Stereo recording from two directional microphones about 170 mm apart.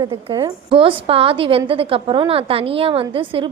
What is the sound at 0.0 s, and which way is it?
A woman's voice, 25° right (ahead or behind).